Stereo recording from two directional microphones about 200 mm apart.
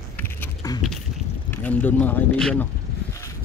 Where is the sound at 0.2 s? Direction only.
15° left (ahead or behind).